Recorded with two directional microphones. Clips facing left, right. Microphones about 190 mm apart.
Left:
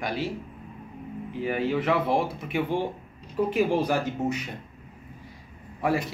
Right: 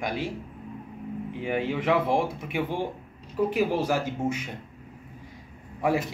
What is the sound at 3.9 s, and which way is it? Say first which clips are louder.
Speech: left 1 dB; 10° right (ahead or behind).